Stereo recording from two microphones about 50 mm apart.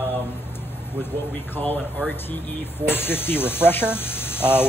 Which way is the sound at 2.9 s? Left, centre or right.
Left.